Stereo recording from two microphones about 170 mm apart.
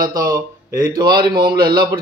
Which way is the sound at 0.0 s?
20° right (ahead or behind).